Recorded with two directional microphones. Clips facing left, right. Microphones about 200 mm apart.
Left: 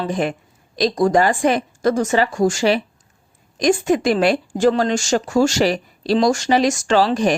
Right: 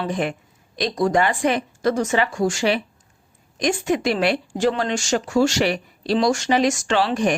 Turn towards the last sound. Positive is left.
turn(degrees=40)  # may be behind; listen again after turning